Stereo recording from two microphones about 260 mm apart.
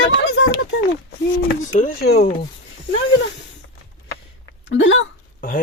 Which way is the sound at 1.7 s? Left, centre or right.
Left.